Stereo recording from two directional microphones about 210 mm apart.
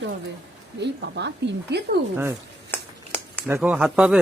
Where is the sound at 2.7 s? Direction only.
10° left (ahead or behind).